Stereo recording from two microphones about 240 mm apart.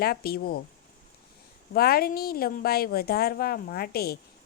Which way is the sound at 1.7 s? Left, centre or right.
Left.